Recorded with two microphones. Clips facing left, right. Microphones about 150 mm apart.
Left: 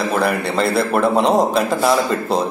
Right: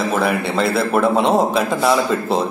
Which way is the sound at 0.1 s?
Centre (ahead or behind).